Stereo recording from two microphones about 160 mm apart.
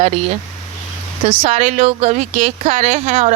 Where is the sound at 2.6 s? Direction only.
40° right (ahead or behind).